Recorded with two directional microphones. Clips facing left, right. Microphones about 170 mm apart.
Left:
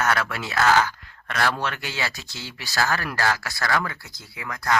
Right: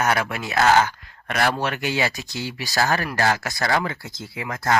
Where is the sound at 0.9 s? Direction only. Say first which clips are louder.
Right 3 dB; 20° right (ahead or behind).